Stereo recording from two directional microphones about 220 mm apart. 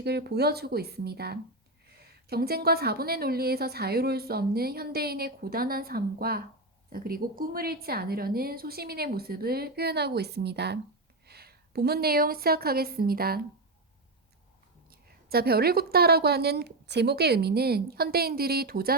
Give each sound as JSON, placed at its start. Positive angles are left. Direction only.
{"t": 0.0, "sound": "a woman's voice", "side_deg": -50}
{"t": 14.8, "sound": "a woman's voice", "side_deg": -45}